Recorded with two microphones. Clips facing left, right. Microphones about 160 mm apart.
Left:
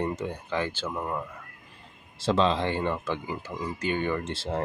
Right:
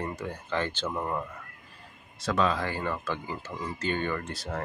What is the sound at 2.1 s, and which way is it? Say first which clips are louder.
Speech: left 3 dB; 30° left (ahead or behind).